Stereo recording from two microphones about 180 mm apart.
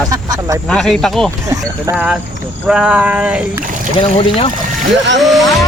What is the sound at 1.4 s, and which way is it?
Speech, 15° right (ahead or behind).